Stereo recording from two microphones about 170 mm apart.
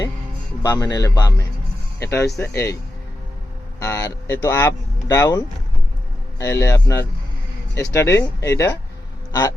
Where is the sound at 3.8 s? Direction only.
15° left (ahead or behind).